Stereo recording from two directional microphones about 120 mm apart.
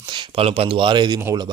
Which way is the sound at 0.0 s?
40° right (ahead or behind).